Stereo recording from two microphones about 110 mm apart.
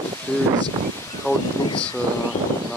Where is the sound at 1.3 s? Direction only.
20° left (ahead or behind).